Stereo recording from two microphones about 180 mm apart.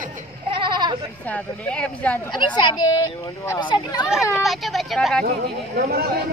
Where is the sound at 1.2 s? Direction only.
10° left (ahead or behind).